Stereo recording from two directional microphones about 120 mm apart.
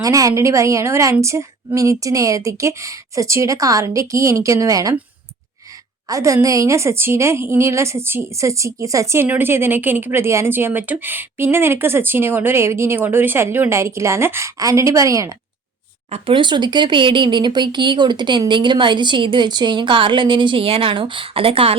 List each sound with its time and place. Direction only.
0.0 s a woman's voice: 30° right (ahead or behind)
6.1 s a woman's voice: 25° right (ahead or behind)
16.0 s speech: 60° right (ahead or behind)
16.3 s speech: 40° right (ahead or behind)